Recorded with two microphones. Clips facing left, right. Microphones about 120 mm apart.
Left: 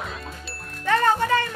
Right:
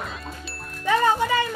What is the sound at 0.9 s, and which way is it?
Music, 10° right (ahead or behind).